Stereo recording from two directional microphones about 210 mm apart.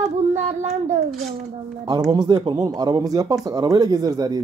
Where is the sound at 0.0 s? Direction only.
35° right (ahead or behind).